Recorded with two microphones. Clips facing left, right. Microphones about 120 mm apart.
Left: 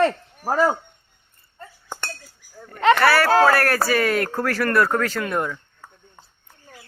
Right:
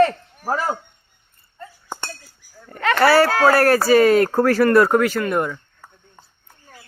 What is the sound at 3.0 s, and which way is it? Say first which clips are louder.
Speech: right 6 dB; 25° right (ahead or behind).